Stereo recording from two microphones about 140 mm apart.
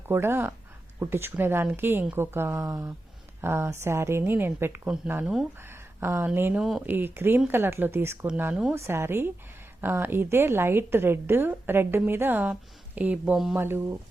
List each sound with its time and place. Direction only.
0.1 s a woman's voice: 15° right (ahead or behind)
6.9 s a woman's voice: 15° right (ahead or behind)